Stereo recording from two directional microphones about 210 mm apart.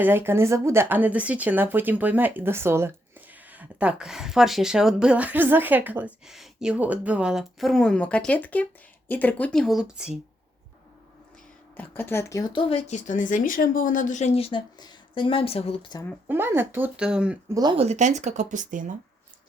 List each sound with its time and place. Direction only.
0.0 s speech: 10° right (ahead or behind)
11.8 s speech: 10° left (ahead or behind)
16.2 s speech: 10° right (ahead or behind)
17.5 s speech: 20° right (ahead or behind); by 18.9 s 35° right (ahead or behind)